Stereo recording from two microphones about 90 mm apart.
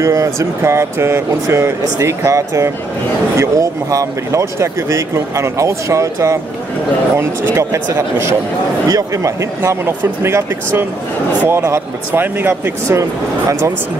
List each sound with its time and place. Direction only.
0.0 s speech: 35° right (ahead or behind)
8.8 s speech: 40° right (ahead or behind)